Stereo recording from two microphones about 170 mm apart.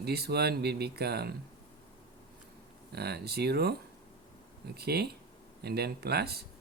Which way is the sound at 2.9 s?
70° right (ahead or behind).